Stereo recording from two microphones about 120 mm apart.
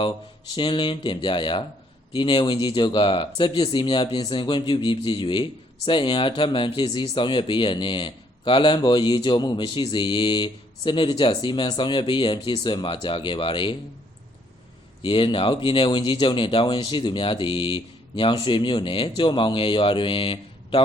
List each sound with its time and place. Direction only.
0.5 s speech: 40° left (ahead or behind)
15.0 s speech: 45° left (ahead or behind)